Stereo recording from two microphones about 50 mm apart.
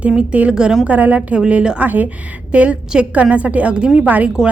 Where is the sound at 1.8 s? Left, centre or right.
Right.